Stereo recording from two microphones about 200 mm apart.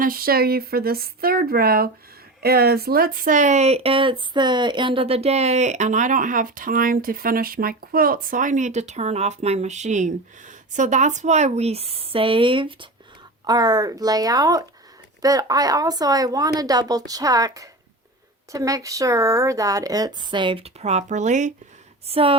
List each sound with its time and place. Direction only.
0.0 s speech: 45° right (ahead or behind); by 22.4 s 30° right (ahead or behind)